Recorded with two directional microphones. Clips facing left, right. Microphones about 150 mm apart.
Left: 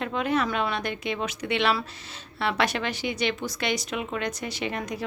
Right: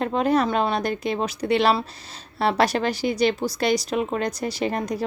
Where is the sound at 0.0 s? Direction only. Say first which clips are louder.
Right 5 dB; 35° right (ahead or behind).